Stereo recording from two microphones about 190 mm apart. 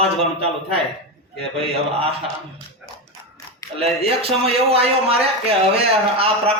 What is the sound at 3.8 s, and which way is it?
A man's voice, 30° right (ahead or behind).